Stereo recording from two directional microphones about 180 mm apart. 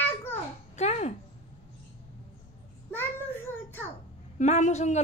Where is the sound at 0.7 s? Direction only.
40° left (ahead or behind).